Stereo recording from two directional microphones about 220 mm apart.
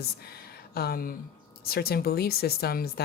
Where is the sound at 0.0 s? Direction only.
45° left (ahead or behind).